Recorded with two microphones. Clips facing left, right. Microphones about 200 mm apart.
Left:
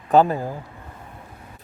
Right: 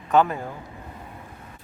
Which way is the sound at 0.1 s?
35° left (ahead or behind).